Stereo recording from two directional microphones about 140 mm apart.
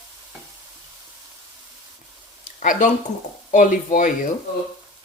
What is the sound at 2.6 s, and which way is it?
Frying, 70° left (ahead or behind).